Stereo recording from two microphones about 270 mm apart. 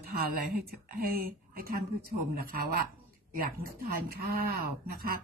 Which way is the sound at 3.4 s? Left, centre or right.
Right.